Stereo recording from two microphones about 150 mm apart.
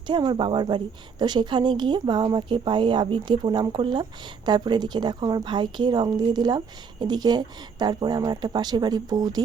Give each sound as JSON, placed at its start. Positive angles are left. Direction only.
{"t": 0.1, "sound": "speech", "side_deg": -30}